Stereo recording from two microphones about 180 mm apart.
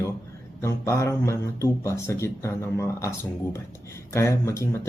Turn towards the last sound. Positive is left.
turn(degrees=15)  # may be behind; listen again after turning